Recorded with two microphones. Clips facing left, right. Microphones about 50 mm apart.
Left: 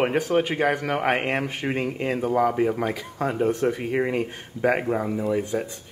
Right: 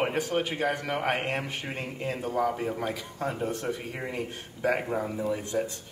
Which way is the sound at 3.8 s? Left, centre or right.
Left.